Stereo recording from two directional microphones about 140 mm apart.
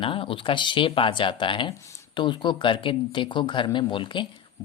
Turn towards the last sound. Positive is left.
turn(degrees=35)  # may be behind; listen again after turning